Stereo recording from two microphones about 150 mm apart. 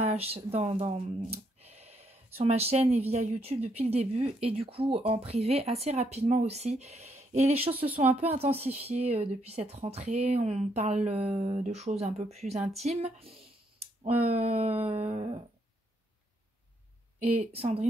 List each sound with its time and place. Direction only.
0.0 s speech: 45° right (ahead or behind)
12.8 s a sound: 45° right (ahead or behind)
17.2 s speech: 40° right (ahead or behind)